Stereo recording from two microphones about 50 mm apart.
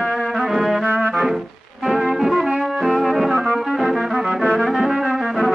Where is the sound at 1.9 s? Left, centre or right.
Centre.